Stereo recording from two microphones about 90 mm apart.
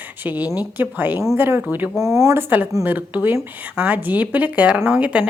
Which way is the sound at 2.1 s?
35° right (ahead or behind).